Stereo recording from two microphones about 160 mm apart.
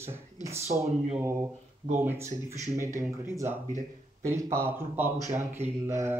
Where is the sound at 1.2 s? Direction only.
20° right (ahead or behind).